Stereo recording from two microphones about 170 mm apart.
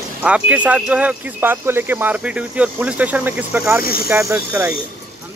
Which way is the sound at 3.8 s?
60° left (ahead or behind).